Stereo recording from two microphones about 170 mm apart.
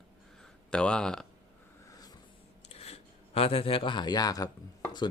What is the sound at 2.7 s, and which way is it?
Speech, 35° left (ahead or behind).